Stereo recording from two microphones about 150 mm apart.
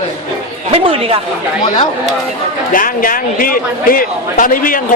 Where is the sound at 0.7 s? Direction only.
40° right (ahead or behind).